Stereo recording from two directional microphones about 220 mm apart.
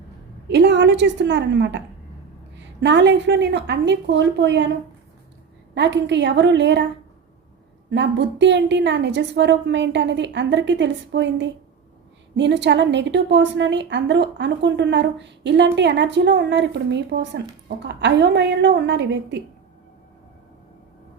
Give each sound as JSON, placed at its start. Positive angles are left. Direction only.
{"t": 0.4, "sound": "a woman's voice", "side_deg": -55}
{"t": 2.8, "sound": "a woman's voice", "side_deg": -55}
{"t": 5.7, "sound": "a woman's voice", "side_deg": -50}
{"t": 7.9, "sound": "a woman's voice", "side_deg": -55}